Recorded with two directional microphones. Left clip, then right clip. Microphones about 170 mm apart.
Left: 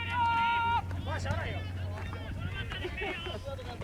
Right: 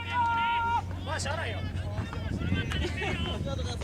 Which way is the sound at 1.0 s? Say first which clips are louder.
Right 4 dB; 45° right (ahead or behind).